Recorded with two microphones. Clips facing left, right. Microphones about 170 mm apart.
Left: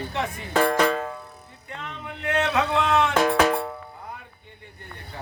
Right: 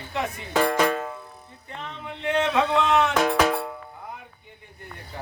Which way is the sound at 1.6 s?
25° right (ahead or behind).